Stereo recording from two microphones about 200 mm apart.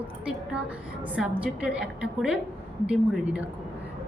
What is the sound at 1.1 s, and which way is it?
A woman's voice, 5° right (ahead or behind).